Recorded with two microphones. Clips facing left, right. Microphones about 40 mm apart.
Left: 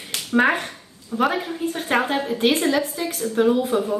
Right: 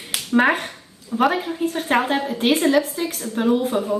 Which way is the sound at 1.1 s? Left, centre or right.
Centre.